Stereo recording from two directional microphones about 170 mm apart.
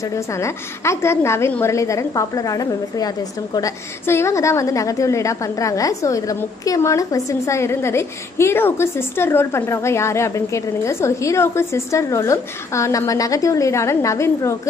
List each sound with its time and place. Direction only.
0.1 s a woman's voice: 15° left (ahead or behind)